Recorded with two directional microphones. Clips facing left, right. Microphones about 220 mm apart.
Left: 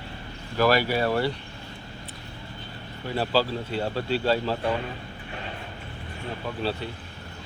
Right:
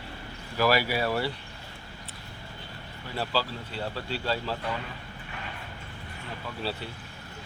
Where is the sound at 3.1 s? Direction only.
20° left (ahead or behind).